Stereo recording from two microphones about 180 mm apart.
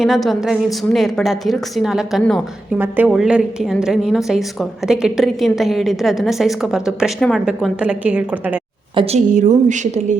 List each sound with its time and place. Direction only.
0.0 s a woman's voice: centre (ahead or behind)
2.7 s a woman's voice: 10° right (ahead or behind)
9.0 s a woman's voice: 35° right (ahead or behind)